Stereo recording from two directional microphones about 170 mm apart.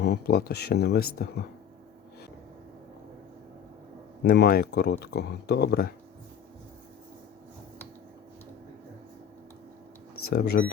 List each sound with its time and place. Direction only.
0.0 s speech: 70° left (ahead or behind)
4.2 s speech: 75° left (ahead or behind)
10.2 s speech: 65° left (ahead or behind)